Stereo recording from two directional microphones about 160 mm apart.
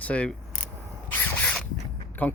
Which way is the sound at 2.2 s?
10° left (ahead or behind).